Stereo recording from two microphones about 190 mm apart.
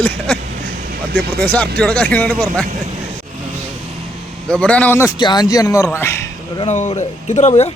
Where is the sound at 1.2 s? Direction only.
55° right (ahead or behind).